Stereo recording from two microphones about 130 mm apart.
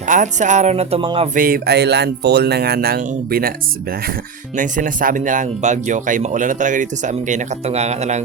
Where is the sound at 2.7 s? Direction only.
80° right.